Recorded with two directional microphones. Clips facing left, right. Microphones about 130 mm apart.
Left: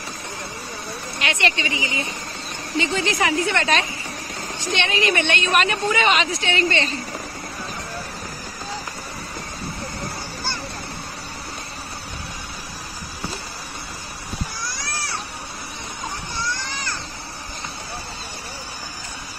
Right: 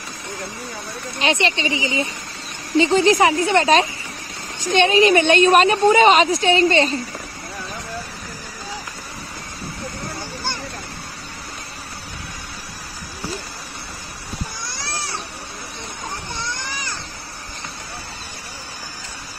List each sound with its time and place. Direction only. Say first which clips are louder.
1.2 s a woman's voice: right 4 dB; 25° right (ahead or behind)
14.8 s baby cry: right 5 dB; 25° right (ahead or behind)
16.5 s baby cry: even; 15° right (ahead or behind)